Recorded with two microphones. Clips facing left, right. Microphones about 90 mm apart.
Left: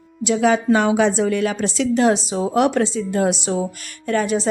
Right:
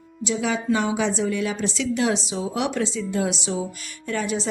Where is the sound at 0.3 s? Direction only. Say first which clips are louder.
Left 7 dB; 55° left (ahead or behind).